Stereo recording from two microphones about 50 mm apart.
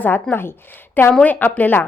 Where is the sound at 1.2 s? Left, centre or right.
Left.